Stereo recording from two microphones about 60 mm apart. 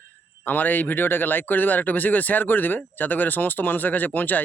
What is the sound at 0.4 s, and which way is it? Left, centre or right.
A man's voice, left.